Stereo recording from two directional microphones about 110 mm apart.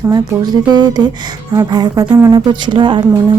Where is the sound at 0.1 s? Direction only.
40° right (ahead or behind).